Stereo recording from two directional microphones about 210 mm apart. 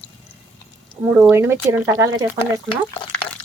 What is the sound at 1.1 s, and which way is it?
Speech, 10° right (ahead or behind).